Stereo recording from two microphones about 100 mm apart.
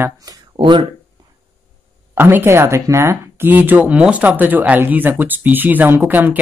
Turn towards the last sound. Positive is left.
turn(degrees=-20)  # may be behind; listen again after turning